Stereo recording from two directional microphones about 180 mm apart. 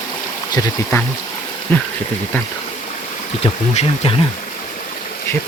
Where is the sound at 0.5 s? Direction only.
15° left (ahead or behind).